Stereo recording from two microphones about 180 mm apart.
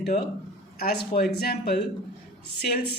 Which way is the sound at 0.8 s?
60° left (ahead or behind).